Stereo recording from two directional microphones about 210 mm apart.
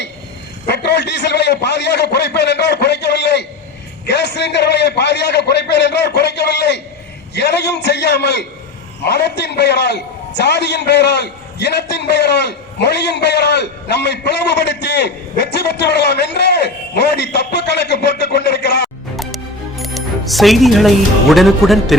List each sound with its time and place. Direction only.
0.7 s a sound: 50° left (ahead or behind)
4.0 s a man's voice: 55° left (ahead or behind)
19.1 s music: centre (ahead or behind)